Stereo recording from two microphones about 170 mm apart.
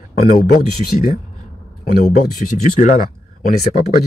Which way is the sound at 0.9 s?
50° left (ahead or behind).